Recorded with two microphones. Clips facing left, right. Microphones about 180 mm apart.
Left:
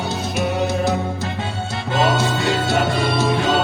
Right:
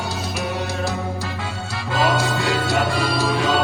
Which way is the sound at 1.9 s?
20° left (ahead or behind).